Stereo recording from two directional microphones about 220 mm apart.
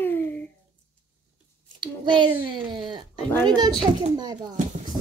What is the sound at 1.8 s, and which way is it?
A child's voice, 20° right (ahead or behind).